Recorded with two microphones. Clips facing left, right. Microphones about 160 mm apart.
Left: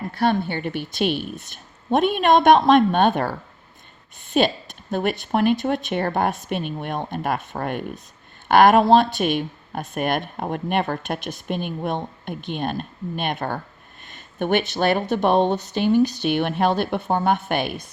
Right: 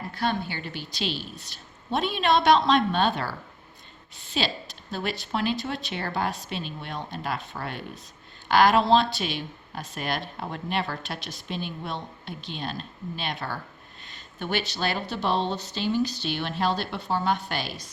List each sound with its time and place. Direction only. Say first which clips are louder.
0.1 s speech: left 7 dB; 60° left (ahead or behind)
4.4 s speech: left 9 dB; 55° left (ahead or behind)
14.1 s a sound: left 9 dB; 55° left (ahead or behind)
14.7 s speech: left 9 dB; 55° left (ahead or behind)